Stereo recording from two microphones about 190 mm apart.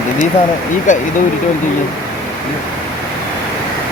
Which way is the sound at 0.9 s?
40° left (ahead or behind).